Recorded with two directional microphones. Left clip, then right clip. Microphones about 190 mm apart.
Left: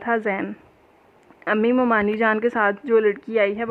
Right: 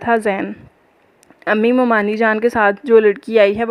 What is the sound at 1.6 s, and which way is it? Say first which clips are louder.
A woman's voice: right 4 dB; 30° right (ahead or behind).